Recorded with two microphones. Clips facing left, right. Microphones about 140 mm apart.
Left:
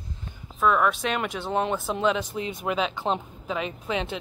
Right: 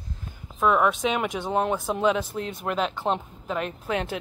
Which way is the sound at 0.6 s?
15° right (ahead or behind).